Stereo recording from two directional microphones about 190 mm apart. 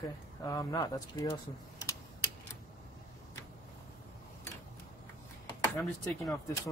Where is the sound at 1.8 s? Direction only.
20° left (ahead or behind).